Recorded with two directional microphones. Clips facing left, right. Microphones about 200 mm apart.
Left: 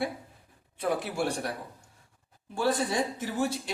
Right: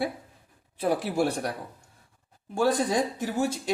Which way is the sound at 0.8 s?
35° right (ahead or behind).